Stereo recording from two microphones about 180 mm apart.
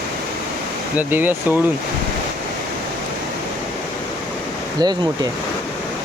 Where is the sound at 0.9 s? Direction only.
10° right (ahead or behind).